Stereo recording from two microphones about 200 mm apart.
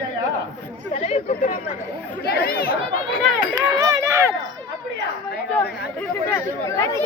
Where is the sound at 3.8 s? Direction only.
15° right (ahead or behind).